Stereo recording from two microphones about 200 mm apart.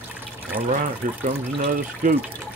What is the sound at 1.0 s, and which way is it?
Speech, 40° right (ahead or behind).